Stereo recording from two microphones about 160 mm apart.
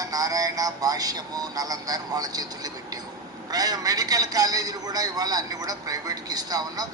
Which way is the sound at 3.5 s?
25° right (ahead or behind).